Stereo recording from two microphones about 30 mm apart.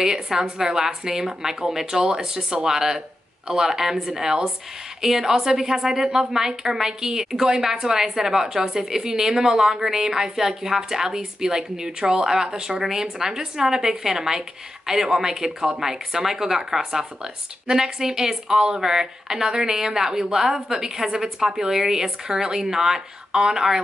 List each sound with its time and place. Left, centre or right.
0.0 s a woman's voice: centre
2.0 s a woman's voice: right